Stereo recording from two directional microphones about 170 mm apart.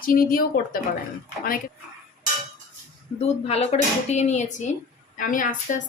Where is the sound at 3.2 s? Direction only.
40° left (ahead or behind).